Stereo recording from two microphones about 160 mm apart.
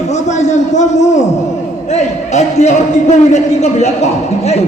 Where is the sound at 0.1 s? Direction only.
45° left (ahead or behind).